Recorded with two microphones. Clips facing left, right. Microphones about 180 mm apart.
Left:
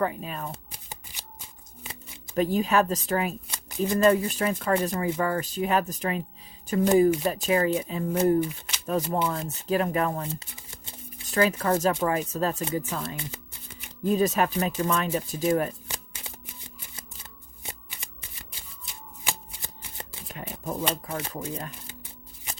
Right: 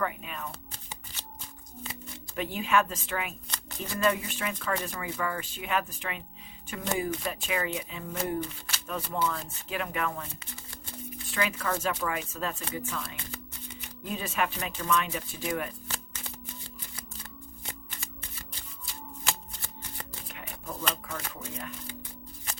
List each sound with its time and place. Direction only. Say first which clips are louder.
0.0 s speech: left 5 dB; 35° left (ahead or behind)
1.1 s shuffling cards: right 1 dB; 15° left (ahead or behind)
1.9 s speech: even; 40° left (ahead or behind)
3.5 s shuffling cards: left 11 dB; 10° left (ahead or behind)
4.0 s speech: left 6 dB; 40° left (ahead or behind)
8.4 s speech: left 8 dB; 15° left (ahead or behind)
8.9 s speech: left 5 dB; 40° left (ahead or behind)
15.9 s shuffling cards: even; 15° left (ahead or behind)
17.7 s shuffling cards: left 2 dB; 15° left (ahead or behind)
19.2 s shuffling cards: left 1 dB; 20° left (ahead or behind)
20.2 s speech: left 9 dB; 40° left (ahead or behind)